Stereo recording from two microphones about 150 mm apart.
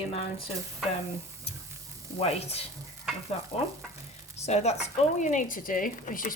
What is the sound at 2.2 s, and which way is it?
A woman's voice, 45° left (ahead or behind).